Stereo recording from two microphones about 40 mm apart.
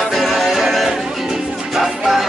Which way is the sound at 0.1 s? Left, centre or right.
Centre.